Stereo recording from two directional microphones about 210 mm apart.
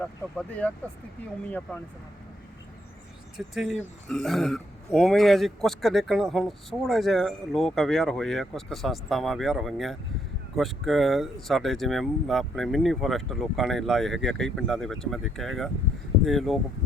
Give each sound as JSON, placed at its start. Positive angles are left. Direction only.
{"t": 0.3, "sound": "speech", "side_deg": 5}
{"t": 3.3, "sound": "speech", "side_deg": 0}